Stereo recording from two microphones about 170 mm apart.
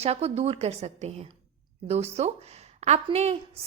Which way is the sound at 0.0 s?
40° right (ahead or behind).